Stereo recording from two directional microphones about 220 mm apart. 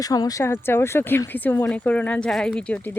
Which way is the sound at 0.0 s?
15° left (ahead or behind).